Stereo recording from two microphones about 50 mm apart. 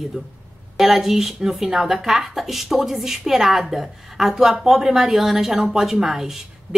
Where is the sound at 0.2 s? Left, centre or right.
Centre.